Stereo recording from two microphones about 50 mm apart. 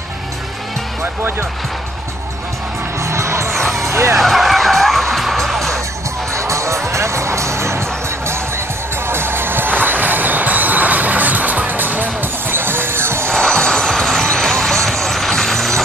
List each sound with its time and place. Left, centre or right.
3.0 s music: right
3.5 s music: centre
3.8 s music: right
4.2 s vehicle: centre
6.3 s music: right
6.9 s music: right
9.0 s music: right
13.3 s music: centre
14.9 s a sound: centre